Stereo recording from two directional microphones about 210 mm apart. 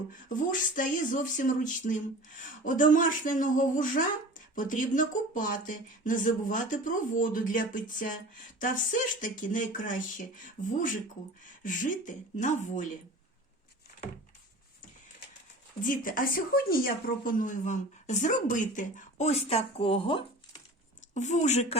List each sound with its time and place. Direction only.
0.1 s a woman's voice: 40° left (ahead or behind)
15.8 s a woman's voice: 40° left (ahead or behind)